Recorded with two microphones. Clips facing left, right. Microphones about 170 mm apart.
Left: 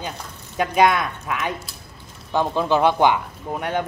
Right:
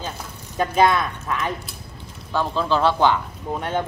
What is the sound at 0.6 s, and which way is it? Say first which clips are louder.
Speech: even; 15° left (ahead or behind).